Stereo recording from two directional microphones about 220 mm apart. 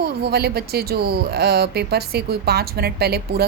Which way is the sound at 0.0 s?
45° right (ahead or behind).